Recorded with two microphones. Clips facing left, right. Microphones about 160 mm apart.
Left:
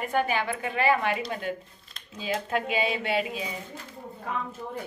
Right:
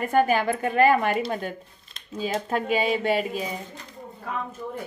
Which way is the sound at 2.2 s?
45° right (ahead or behind).